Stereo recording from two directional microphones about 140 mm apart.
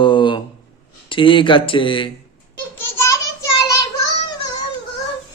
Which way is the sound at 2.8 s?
20° left (ahead or behind).